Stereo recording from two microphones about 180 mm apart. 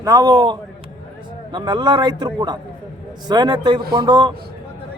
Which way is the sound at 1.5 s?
25° right (ahead or behind).